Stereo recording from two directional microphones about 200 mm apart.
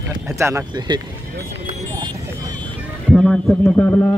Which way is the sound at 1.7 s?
20° right (ahead or behind).